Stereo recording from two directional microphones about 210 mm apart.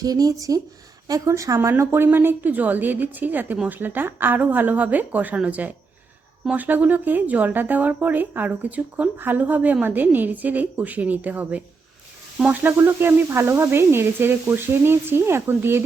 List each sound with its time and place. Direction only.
0.0 s speech: 20° right (ahead or behind)